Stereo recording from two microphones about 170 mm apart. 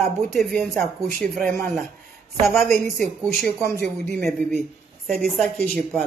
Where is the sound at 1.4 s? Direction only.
55° right (ahead or behind).